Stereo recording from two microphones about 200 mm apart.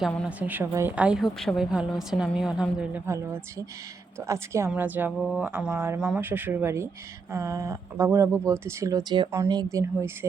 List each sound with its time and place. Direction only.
0.0 s a woman's voice: centre (ahead or behind); by 9.6 s 15° right (ahead or behind)